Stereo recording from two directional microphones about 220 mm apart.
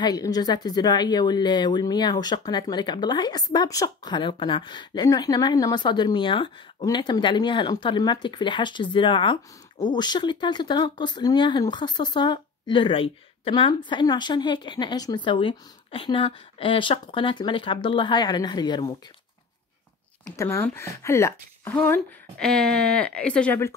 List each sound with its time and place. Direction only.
0.0 s a woman's voice: 20° left (ahead or behind)
20.3 s a woman's voice: 10° left (ahead or behind)